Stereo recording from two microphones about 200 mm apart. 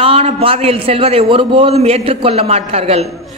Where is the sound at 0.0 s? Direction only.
30° right (ahead or behind).